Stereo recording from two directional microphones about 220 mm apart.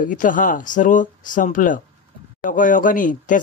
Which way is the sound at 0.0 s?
35° left (ahead or behind).